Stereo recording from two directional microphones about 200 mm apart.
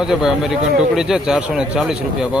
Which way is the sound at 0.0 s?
5° right (ahead or behind).